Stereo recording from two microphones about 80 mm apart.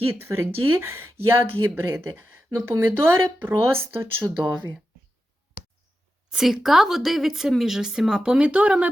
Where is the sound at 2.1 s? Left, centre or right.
Right.